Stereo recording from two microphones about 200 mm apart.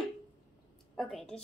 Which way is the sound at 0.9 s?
5° left (ahead or behind).